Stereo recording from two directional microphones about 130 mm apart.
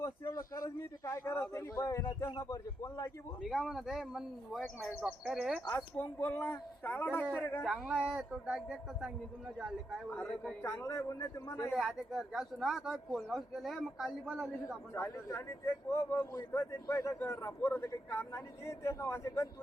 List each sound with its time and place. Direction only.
0.0 s a man's voice: 25° left (ahead or behind)
3.5 s speech: centre (ahead or behind)
5.6 s speech: 15° left (ahead or behind)
7.6 s speech: 5° right (ahead or behind)
10.1 s a man's voice: 10° left (ahead or behind)
11.7 s speech: centre (ahead or behind)
14.9 s a man's voice: 20° left (ahead or behind)